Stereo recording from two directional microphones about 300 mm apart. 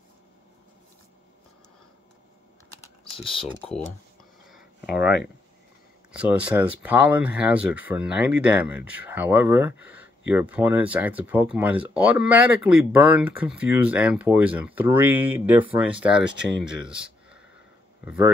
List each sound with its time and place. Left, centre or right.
2.8 s typing: centre
4.5 s a sound: centre
4.9 s speech: left
6.1 s speech: centre